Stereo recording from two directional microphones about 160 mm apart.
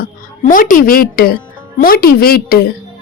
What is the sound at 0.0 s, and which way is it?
A woman's voice, 55° left (ahead or behind).